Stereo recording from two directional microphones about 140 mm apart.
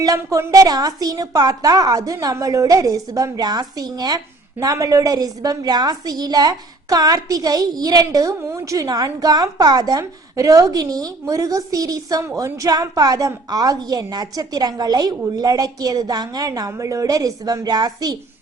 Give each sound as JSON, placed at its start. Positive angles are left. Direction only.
{"t": 0.0, "sound": "a woman's voice", "side_deg": -25}